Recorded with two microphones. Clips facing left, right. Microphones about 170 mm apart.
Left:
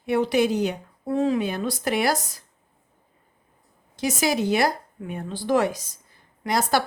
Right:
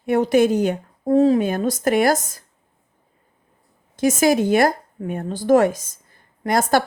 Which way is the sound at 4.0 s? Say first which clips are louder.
Right 7 dB; 50° right (ahead or behind).